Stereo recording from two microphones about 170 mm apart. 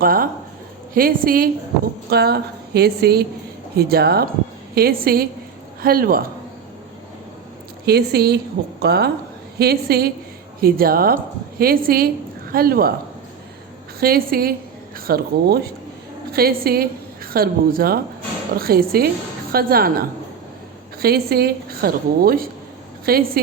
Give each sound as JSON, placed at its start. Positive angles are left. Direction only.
{"t": 0.0, "sound": "a woman's voice", "side_deg": -60}
{"t": 2.0, "sound": "a woman's voice", "side_deg": -70}
{"t": 7.9, "sound": "a woman's voice", "side_deg": -70}
{"t": 14.0, "sound": "a woman's voice", "side_deg": -60}